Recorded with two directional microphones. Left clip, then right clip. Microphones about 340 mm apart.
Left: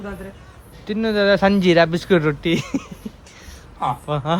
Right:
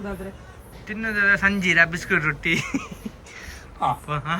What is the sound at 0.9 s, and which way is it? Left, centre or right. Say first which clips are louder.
Speech: left 3 dB; centre.